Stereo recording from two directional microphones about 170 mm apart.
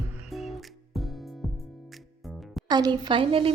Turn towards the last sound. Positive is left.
turn(degrees=-30)  # may be behind; listen again after turning